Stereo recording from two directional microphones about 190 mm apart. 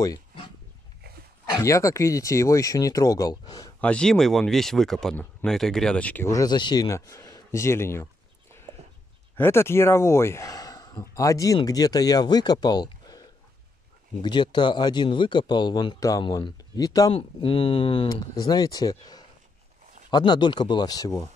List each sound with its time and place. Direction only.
0.0 s a sound: 20° left (ahead or behind)
1.6 s speech: 15° left (ahead or behind)
3.8 s speech: 5° left (ahead or behind)